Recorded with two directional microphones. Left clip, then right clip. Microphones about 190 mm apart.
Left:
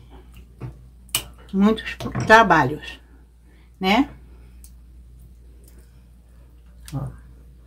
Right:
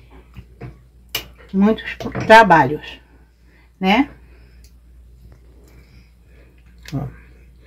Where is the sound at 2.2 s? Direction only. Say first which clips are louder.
Right 4 dB; 10° right (ahead or behind).